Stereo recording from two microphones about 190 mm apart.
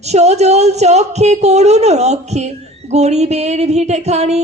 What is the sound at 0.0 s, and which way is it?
Music, 35° right (ahead or behind).